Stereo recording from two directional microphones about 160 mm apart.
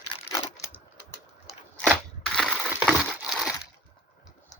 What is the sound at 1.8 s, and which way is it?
Crunch, centre (ahead or behind).